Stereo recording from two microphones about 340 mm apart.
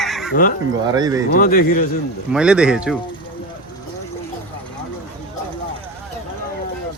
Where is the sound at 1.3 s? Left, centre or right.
Left.